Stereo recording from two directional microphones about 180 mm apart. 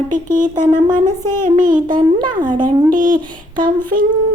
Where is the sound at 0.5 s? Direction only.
25° right (ahead or behind).